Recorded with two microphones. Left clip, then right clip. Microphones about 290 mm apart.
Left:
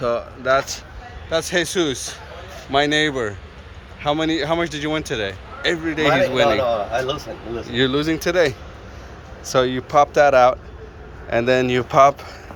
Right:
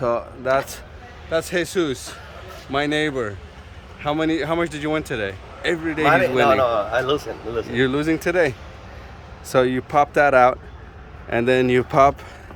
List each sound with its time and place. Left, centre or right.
0.0 s speech: centre